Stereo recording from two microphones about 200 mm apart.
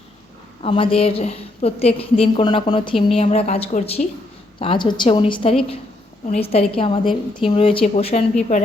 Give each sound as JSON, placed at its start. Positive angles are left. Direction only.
{"t": 0.6, "sound": "a woman's voice", "side_deg": 25}
{"t": 4.6, "sound": "a woman's voice", "side_deg": 25}